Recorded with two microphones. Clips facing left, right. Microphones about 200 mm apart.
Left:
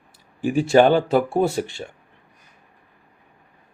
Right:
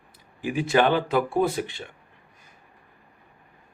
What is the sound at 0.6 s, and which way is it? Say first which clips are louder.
Speech: left 6 dB; 30° left (ahead or behind).